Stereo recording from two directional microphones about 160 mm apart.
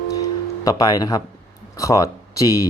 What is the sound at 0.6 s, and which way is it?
Speech, 25° left (ahead or behind).